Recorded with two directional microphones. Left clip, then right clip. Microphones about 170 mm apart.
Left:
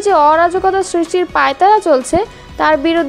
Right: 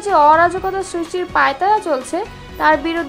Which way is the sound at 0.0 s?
35° left (ahead or behind).